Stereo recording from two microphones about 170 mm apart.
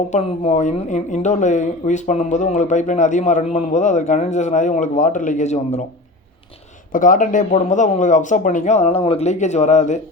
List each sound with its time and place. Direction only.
0.1 s speech: 40° left (ahead or behind)
6.9 s speech: 50° left (ahead or behind)